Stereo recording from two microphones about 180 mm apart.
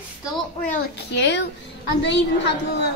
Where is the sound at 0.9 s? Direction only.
70° left (ahead or behind).